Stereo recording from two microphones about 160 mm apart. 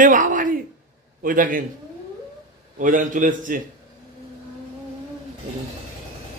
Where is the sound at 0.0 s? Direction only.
55° right (ahead or behind).